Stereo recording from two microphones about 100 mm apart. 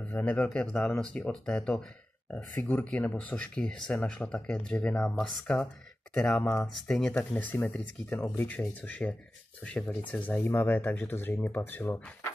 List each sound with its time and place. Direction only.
0.0 s speech: 15° left (ahead or behind)